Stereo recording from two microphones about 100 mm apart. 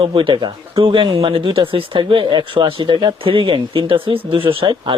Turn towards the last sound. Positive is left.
turn(degrees=-50)  # may be behind; listen again after turning